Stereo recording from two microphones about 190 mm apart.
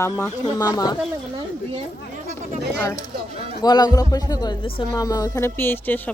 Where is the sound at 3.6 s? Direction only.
20° left (ahead or behind).